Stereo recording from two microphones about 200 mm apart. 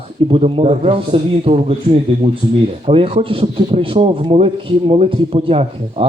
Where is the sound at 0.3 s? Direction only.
30° right (ahead or behind).